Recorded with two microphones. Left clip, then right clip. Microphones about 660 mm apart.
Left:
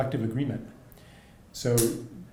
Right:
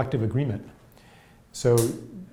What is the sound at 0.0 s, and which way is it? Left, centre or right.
Speech, right.